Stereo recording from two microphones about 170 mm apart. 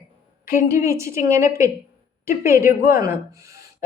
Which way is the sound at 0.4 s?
15° right (ahead or behind).